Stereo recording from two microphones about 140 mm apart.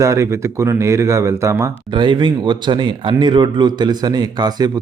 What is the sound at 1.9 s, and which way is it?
Speech, 35° right (ahead or behind).